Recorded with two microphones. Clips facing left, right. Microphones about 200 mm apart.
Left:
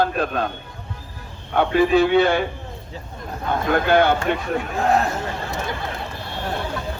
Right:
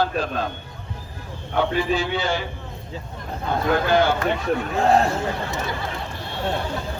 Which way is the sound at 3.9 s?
60° left (ahead or behind).